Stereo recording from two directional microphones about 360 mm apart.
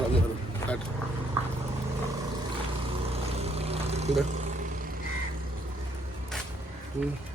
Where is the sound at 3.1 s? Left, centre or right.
Centre.